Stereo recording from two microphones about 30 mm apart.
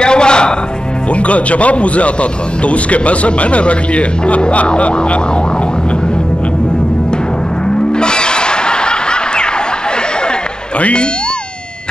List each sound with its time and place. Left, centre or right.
0.0 s music: left
1.1 s speech: left
7.6 s a sound: left
10.8 s speech: left